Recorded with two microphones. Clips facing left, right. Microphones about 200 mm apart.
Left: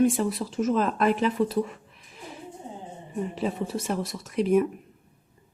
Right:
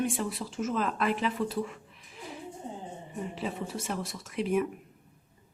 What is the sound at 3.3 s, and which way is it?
Speech, 40° left (ahead or behind).